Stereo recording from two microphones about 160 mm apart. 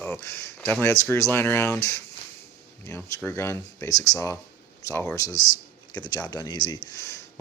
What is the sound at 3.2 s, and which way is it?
Speech, 15° left (ahead or behind).